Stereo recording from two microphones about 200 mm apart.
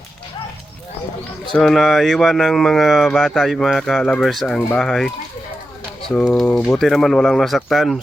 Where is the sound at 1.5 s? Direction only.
Centre (ahead or behind).